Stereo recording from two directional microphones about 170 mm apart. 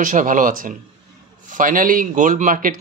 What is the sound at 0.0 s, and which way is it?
Speech, 50° right (ahead or behind).